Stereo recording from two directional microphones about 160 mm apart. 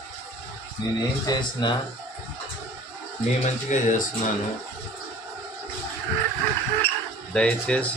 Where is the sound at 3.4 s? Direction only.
50° left (ahead or behind).